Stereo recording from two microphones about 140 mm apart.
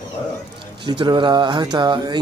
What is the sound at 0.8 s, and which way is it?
Speech, 35° right (ahead or behind).